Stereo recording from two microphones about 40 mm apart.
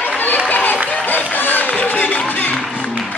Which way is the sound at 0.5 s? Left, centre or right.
Left.